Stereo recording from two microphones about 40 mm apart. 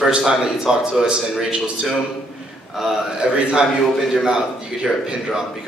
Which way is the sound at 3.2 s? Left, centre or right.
Right.